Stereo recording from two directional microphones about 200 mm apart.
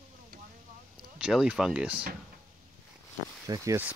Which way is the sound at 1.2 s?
5° right (ahead or behind).